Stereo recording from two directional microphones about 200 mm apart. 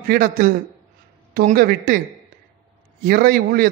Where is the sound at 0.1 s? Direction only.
45° right (ahead or behind).